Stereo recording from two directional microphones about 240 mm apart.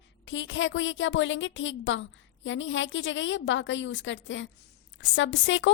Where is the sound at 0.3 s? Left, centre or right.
Left.